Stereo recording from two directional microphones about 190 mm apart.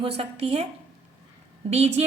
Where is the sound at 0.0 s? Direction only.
30° right (ahead or behind).